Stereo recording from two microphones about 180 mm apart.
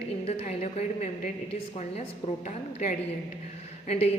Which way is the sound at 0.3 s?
35° left (ahead or behind).